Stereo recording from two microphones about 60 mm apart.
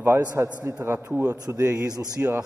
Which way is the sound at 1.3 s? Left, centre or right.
Right.